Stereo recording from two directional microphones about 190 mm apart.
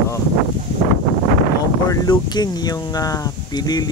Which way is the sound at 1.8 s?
20° left (ahead or behind).